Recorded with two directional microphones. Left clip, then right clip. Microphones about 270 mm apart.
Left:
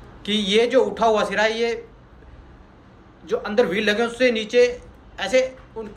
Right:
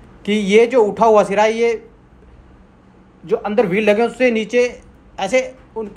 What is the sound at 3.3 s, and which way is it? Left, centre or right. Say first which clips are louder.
A woman's voice: right 4 dB; centre.